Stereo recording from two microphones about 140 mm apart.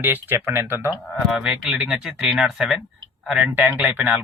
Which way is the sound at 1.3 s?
5° right (ahead or behind).